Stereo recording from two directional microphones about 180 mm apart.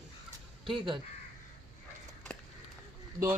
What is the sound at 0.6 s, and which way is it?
Speech, 25° right (ahead or behind).